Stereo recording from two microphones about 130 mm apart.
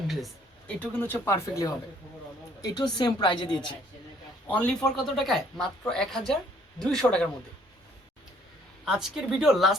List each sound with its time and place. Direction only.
0.8 s a woman's voice: 15° left (ahead or behind); by 3.6 s 35° left (ahead or behind)
4.4 s speech: 10° left (ahead or behind)
8.8 s speech: 5° right (ahead or behind)